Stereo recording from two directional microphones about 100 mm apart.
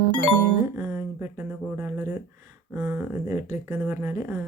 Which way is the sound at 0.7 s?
20° right (ahead or behind).